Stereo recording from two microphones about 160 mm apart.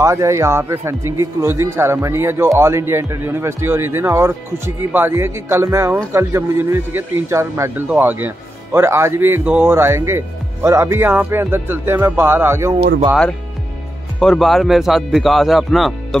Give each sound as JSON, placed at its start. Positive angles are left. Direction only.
{"t": 0.0, "sound": "speech", "side_deg": -20}
{"t": 14.2, "sound": "speech", "side_deg": 5}